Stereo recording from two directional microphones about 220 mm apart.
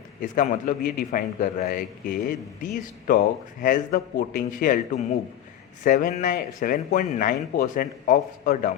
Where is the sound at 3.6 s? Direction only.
40° left (ahead or behind).